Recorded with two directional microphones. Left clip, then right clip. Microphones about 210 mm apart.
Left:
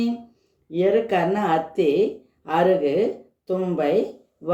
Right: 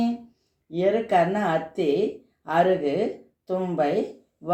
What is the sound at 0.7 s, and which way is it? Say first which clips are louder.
Speech: left 2 dB; 30° right (ahead or behind).